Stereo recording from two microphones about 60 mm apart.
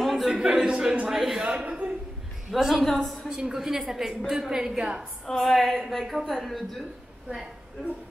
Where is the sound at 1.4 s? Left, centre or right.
Centre.